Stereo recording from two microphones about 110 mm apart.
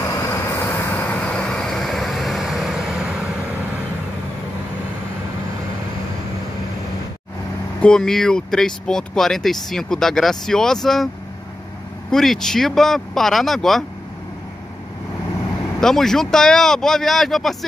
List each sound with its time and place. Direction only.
0.1 s vehicle: 25° left (ahead or behind); by 3.1 s 5° right (ahead or behind)
7.8 s speech: 5° left (ahead or behind)
12.1 s speech: 5° left (ahead or behind)
15.8 s speech: 5° left (ahead or behind)